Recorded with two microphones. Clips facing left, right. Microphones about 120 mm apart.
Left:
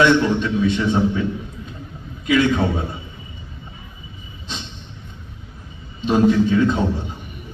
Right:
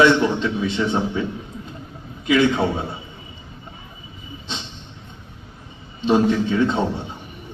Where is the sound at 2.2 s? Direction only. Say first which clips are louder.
Even; 20° right (ahead or behind).